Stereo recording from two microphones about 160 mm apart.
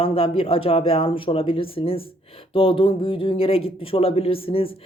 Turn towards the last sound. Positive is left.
turn(degrees=35)  # may be behind; listen again after turning